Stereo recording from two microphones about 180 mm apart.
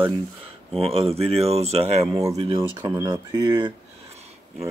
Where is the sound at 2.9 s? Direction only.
25° right (ahead or behind).